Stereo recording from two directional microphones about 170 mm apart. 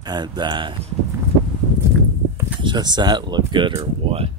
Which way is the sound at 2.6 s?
25° right (ahead or behind).